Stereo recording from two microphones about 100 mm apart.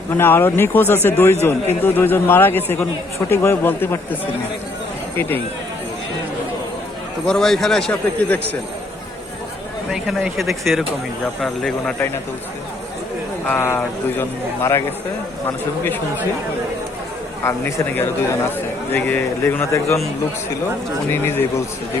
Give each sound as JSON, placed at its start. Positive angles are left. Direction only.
{"t": 0.2, "sound": "a man's voice", "side_deg": 20}
{"t": 7.3, "sound": "speech", "side_deg": 5}
{"t": 9.9, "sound": "speech", "side_deg": -5}
{"t": 13.6, "sound": "a man's voice", "side_deg": 25}
{"t": 17.4, "sound": "a man's voice", "side_deg": 25}
{"t": 21.1, "sound": "a man's voice", "side_deg": 20}